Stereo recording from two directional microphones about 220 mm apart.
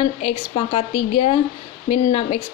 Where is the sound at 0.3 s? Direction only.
30° left (ahead or behind).